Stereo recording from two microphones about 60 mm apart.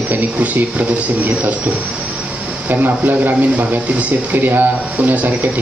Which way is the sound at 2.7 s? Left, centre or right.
Right.